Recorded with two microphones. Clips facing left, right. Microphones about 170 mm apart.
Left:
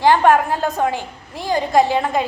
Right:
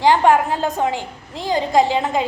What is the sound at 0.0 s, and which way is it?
A woman's voice, 15° right (ahead or behind).